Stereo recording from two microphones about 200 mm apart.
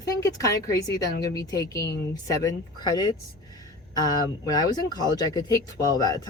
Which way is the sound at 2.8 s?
20° left (ahead or behind).